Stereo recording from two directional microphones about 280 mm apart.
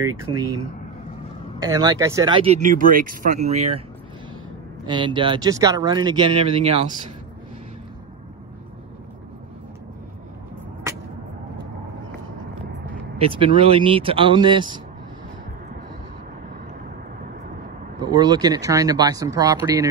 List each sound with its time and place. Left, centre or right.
0.0 s speech: centre
1.6 s speech: centre
4.8 s speech: centre
13.2 s speech: centre
18.0 s speech: centre